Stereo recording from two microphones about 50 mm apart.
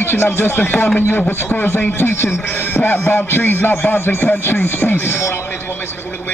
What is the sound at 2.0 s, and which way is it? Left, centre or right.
Speech, left.